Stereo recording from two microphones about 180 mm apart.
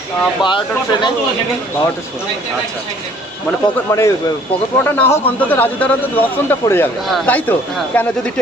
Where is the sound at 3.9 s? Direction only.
15° left (ahead or behind).